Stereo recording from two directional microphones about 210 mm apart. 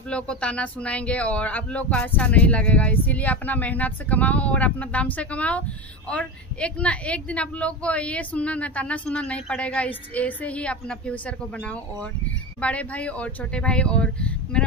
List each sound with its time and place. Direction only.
0.1 s a woman's voice: 5° left (ahead or behind)